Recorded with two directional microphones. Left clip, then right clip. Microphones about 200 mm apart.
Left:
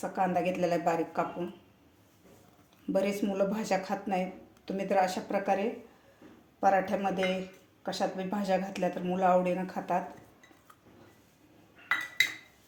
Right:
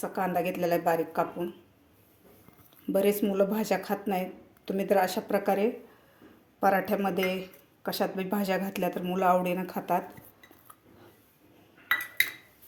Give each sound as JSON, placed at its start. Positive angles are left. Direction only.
{"t": 0.0, "sound": "speech", "side_deg": -25}
{"t": 2.9, "sound": "speech", "side_deg": -25}